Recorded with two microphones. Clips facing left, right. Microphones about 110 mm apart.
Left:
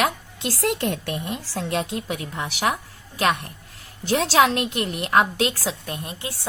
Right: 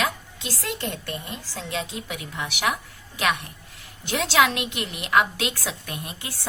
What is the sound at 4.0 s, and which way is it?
A woman's voice, 35° left (ahead or behind).